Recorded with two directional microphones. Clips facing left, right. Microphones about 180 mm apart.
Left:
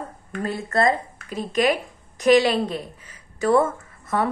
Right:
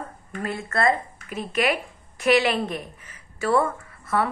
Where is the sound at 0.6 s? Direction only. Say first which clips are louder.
Left 2 dB; 20° left (ahead or behind).